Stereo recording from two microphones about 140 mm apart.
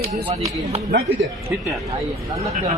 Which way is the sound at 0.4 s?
50° right (ahead or behind).